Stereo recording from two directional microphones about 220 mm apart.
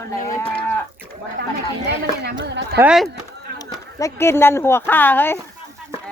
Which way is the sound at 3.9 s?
15° left (ahead or behind).